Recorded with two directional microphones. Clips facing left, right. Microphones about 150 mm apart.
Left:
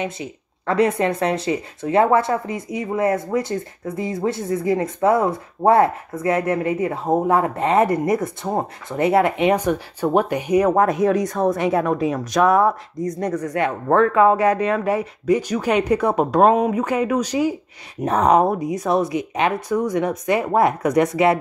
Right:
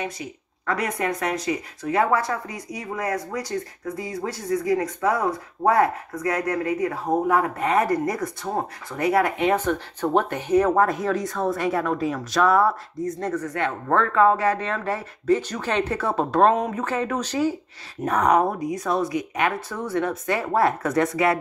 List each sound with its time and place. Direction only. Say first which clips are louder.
0.0 s speech: left 4 dB; 25° left (ahead or behind)
18.0 s speech: left 4 dB; 25° left (ahead or behind)